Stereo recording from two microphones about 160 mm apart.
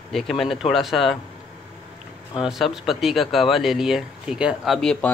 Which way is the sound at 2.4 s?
Centre (ahead or behind).